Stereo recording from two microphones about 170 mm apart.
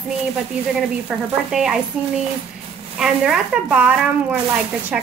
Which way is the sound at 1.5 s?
5° right (ahead or behind).